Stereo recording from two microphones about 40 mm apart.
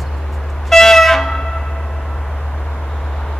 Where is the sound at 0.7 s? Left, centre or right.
Centre.